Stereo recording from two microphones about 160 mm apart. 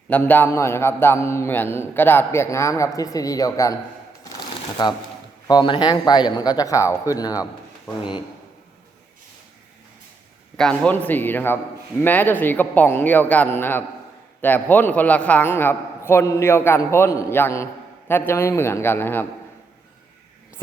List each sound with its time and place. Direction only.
0.1 s a man's voice: 10° left (ahead or behind)
4.2 s shuffling cards: 25° left (ahead or behind)
5.5 s a man's voice: 30° left (ahead or behind)
10.6 s a man's voice: 5° left (ahead or behind)